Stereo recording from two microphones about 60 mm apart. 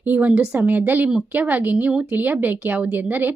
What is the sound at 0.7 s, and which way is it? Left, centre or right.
A woman's voice, right.